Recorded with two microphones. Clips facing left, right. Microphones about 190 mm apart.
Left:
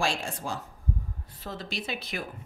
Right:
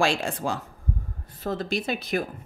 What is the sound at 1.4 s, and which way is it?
Speech, 50° right (ahead or behind).